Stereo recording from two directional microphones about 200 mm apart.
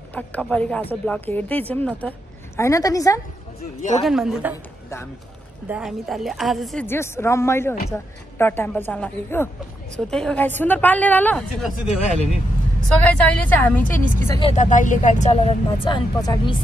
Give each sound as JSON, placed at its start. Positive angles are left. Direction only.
{"t": 0.1, "sound": "a woman's voice", "side_deg": 5}
{"t": 4.0, "sound": "a woman's voice", "side_deg": 0}
{"t": 5.7, "sound": "a woman's voice", "side_deg": -5}
{"t": 6.9, "sound": "a woman's voice", "side_deg": 15}
{"t": 14.5, "sound": "speech", "side_deg": 35}